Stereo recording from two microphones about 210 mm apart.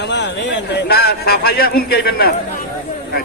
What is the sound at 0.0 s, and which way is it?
A man's voice, 55° left (ahead or behind).